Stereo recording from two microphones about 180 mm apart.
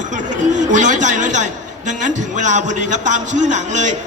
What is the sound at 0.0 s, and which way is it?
A man's voice, 45° right (ahead or behind).